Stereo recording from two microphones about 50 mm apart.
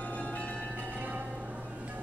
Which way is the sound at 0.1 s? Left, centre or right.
Left.